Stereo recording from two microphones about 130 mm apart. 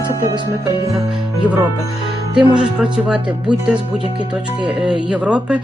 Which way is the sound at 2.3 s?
10° right (ahead or behind).